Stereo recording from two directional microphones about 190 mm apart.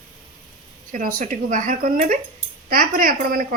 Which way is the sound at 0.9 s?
45° right (ahead or behind).